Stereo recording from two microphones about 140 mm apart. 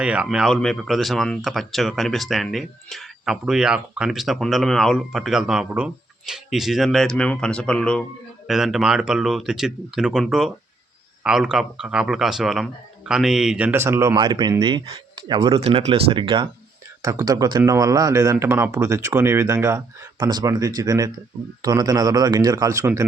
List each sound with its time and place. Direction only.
0.0 s speech: 10° right (ahead or behind)
14.2 s speech: 30° right (ahead or behind)
15.6 s speech: 40° right (ahead or behind)
17.0 s speech: 25° right (ahead or behind)